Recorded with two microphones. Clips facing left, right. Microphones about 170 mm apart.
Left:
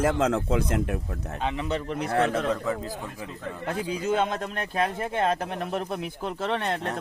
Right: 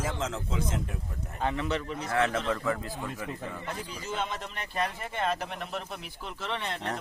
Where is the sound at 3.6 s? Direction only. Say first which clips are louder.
Left 14 dB; 60° left (ahead or behind).